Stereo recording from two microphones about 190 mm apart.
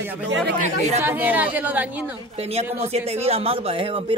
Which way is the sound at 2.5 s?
35° right (ahead or behind).